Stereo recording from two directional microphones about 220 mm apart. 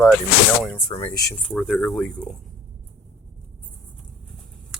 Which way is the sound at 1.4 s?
Centre (ahead or behind).